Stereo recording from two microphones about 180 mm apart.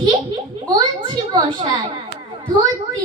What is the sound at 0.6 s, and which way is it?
Speech, 25° right (ahead or behind).